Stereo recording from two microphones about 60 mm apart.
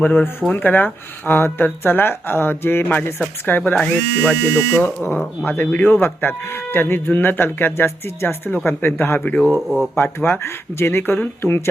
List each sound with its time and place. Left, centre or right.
0.0 s speech: left
3.8 s speech: centre
9.6 s speech: centre
9.9 s speech: left